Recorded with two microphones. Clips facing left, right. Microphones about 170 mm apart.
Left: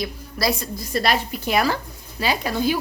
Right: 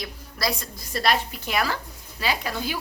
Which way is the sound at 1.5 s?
35° left (ahead or behind).